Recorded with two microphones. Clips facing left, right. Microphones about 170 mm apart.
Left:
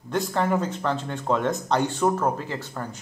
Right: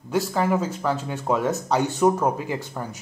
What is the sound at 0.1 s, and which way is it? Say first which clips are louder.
Speech: right 2 dB; 5° right (ahead or behind).